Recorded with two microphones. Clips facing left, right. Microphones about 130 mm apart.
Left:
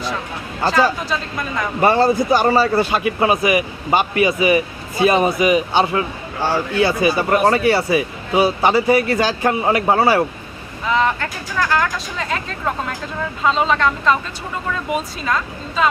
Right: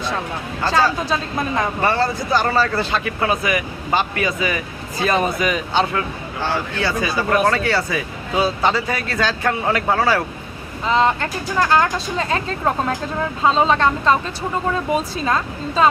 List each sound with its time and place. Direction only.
1.1 s speech: 30° right (ahead or behind)
1.8 s speech: 20° left (ahead or behind)
7.3 s speech: 25° left (ahead or behind)
10.8 s speech: 30° right (ahead or behind)